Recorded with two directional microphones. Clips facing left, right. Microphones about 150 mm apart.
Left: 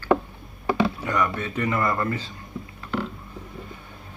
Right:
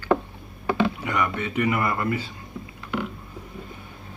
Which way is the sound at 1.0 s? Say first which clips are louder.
Left 1 dB; 10° right (ahead or behind).